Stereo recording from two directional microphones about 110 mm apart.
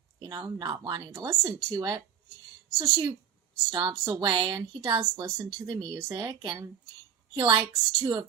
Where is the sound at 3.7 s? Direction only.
35° right (ahead or behind).